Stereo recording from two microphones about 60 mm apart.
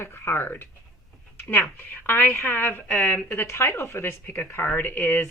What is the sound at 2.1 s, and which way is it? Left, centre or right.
Speech, left.